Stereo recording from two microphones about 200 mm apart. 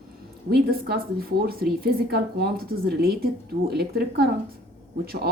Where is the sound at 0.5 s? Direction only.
50° right (ahead or behind).